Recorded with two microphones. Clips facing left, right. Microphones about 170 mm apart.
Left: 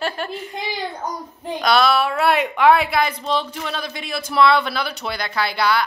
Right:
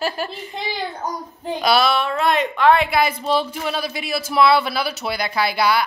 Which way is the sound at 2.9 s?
10° right (ahead or behind).